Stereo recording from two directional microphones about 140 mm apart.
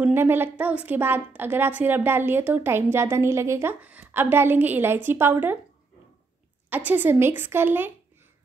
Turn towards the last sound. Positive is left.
turn(degrees=-15)  # may be behind; listen again after turning